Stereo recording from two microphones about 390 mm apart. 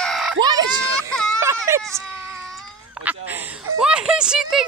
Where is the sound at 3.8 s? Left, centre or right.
Centre.